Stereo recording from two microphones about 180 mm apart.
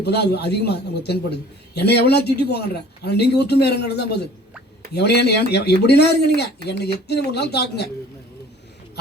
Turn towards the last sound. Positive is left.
turn(degrees=65)  # may be behind; listen again after turning